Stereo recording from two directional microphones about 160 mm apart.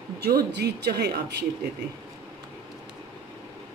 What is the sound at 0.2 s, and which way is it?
Speech, 85° right.